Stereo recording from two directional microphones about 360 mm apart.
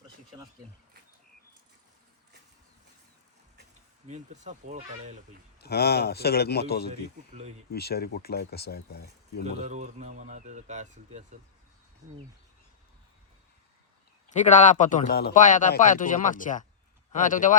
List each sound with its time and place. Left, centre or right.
3.6 s speech: centre
5.5 s a man's voice: left
6.9 s speech: centre
7.7 s a man's voice: left
9.4 s speech: centre
14.3 s a man's voice: centre